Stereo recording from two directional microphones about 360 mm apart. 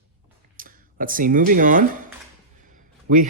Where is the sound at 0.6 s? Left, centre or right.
Right.